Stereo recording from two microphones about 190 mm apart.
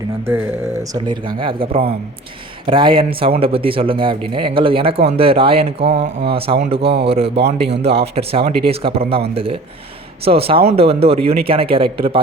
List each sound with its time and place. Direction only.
0.3 s a man's voice: 15° right (ahead or behind)